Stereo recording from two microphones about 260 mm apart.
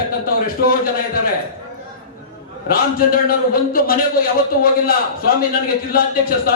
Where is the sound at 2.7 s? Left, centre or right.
Left.